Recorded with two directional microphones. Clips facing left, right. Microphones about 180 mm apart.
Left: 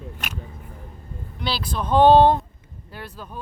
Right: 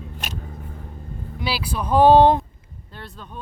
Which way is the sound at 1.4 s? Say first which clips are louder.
Right 1 dB; 10° right (ahead or behind).